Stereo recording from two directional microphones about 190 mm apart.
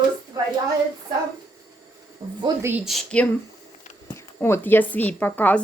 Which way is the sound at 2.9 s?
5° left (ahead or behind).